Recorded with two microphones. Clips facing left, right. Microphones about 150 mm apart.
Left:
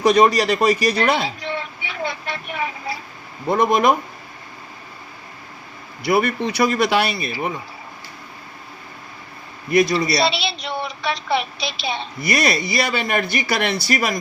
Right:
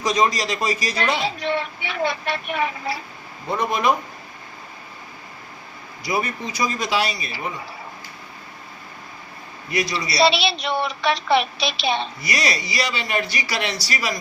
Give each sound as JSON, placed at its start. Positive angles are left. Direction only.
{"t": 0.0, "sound": "a man's voice", "side_deg": 65}
{"t": 1.4, "sound": "vehicle", "side_deg": -75}
{"t": 3.6, "sound": "speech", "side_deg": 55}
{"t": 6.0, "sound": "a man's voice", "side_deg": 65}
{"t": 9.7, "sound": "speech", "side_deg": 50}
{"t": 10.2, "sound": "a woman's voice", "side_deg": -75}
{"t": 12.2, "sound": "speech", "side_deg": 55}